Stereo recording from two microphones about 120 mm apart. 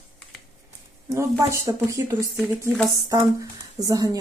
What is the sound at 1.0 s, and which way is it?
Speech, 25° right (ahead or behind).